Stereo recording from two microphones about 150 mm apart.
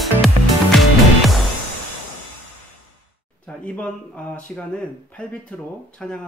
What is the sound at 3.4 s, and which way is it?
Speech, 10° left (ahead or behind).